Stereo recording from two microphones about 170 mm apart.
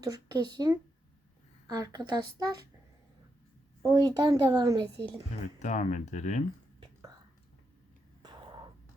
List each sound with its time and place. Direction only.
0.0 s speech: 20° right (ahead or behind)
3.8 s speech: 20° right (ahead or behind)
5.5 s speech: 45° left (ahead or behind)
8.2 s a sound: 25° right (ahead or behind)